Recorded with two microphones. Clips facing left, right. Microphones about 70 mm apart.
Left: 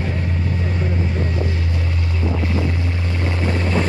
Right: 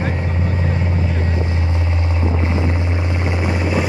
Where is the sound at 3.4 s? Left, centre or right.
Centre.